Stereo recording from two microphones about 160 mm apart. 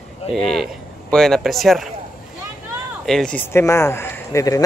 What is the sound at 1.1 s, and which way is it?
Speech, 5° left (ahead or behind).